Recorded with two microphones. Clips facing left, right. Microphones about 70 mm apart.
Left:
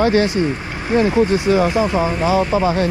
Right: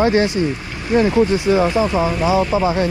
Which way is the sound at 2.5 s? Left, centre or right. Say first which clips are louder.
Even; right.